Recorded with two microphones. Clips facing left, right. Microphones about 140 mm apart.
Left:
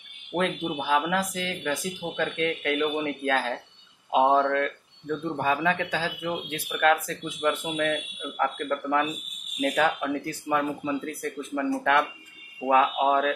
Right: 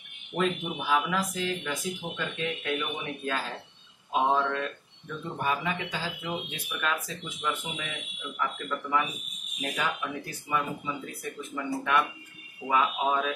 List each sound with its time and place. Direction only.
0.4 s speech: 75° left (ahead or behind)
2.1 s speech: 80° left
4.1 s speech: 70° left (ahead or behind); by 6.0 s 90° left
6.8 s speech: 75° left (ahead or behind)